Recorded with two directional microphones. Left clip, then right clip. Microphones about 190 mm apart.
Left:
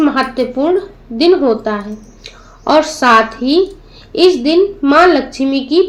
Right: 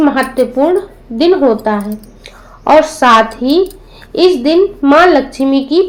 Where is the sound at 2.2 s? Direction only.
30° right (ahead or behind).